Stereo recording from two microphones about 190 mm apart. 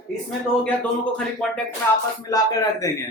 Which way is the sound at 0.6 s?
5° left (ahead or behind).